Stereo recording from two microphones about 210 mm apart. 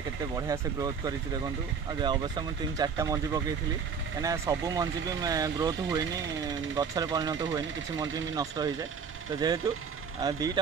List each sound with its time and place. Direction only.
0.4 s speech: 15° right (ahead or behind)